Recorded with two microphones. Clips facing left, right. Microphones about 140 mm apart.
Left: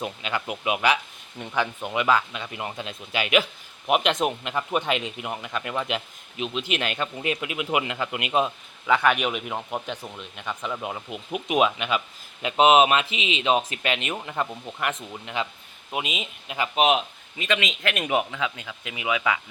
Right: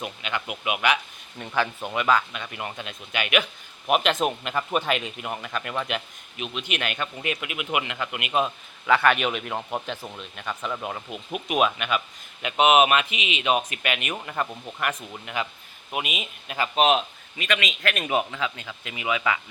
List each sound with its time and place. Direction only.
0.0 s speech: 30° left (ahead or behind)
1.4 s speech: 15° left (ahead or behind)
5.9 s speech: 25° left (ahead or behind)
8.4 s speech: 15° left (ahead or behind)
9.6 s speech: 5° right (ahead or behind)
10.7 s speech: 5° left (ahead or behind)